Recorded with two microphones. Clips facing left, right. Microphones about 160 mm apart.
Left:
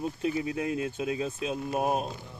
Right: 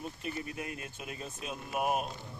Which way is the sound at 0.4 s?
90° left.